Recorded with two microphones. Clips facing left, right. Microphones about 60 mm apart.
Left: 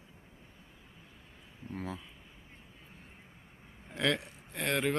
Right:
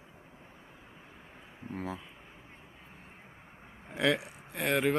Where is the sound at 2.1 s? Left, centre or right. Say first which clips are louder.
Right 3 dB; right.